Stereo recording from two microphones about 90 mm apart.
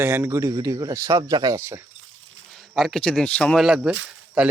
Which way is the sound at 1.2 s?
50° right (ahead or behind).